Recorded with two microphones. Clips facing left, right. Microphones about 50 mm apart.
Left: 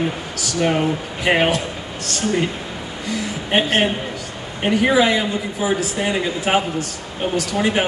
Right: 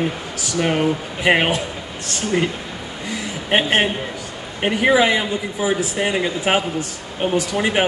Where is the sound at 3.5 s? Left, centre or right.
Centre.